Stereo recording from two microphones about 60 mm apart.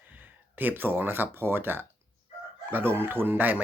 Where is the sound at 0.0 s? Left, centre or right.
Right.